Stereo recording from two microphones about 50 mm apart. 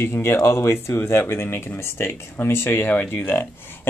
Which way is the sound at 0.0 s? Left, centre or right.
Left.